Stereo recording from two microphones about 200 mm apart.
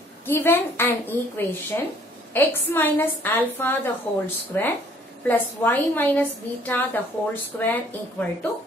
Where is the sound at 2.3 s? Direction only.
10° left (ahead or behind).